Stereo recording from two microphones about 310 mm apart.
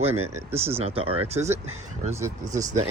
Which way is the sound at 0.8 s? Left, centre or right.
Centre.